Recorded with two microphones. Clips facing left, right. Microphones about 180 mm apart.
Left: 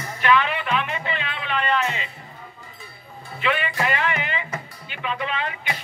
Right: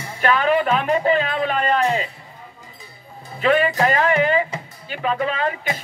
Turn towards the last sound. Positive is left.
turn(degrees=-40)  # may be behind; listen again after turning